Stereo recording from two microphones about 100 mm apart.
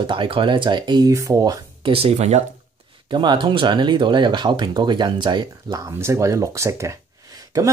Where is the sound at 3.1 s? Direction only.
50° right (ahead or behind).